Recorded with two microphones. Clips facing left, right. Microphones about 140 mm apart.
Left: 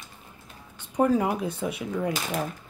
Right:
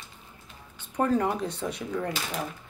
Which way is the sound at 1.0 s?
10° left (ahead or behind).